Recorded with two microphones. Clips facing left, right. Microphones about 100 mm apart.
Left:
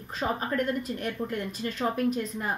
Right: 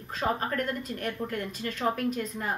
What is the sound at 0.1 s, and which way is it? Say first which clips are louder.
A woman's voice: even; 20° left (ahead or behind).